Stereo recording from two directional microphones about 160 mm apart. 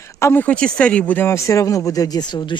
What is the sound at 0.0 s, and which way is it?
Speech, 15° left (ahead or behind).